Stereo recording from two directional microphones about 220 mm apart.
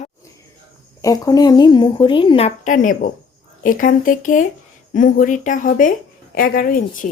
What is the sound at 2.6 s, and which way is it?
Speech, 35° left (ahead or behind).